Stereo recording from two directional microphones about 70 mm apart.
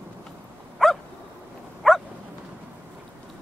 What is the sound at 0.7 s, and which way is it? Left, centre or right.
Dog, centre.